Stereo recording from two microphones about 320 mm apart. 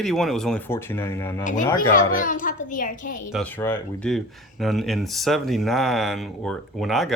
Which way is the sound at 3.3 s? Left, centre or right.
Centre.